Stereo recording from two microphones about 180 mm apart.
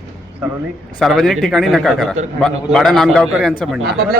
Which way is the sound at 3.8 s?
65° right (ahead or behind).